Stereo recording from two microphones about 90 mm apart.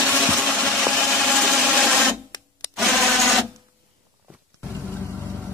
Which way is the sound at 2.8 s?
Centre (ahead or behind).